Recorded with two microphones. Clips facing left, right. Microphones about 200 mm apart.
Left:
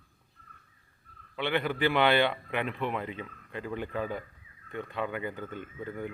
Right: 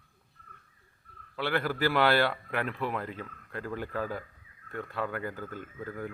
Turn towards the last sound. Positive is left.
turn(degrees=-5)  # may be behind; listen again after turning